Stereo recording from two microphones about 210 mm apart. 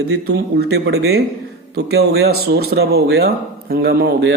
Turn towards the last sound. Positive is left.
turn(degrees=-50)  # may be behind; listen again after turning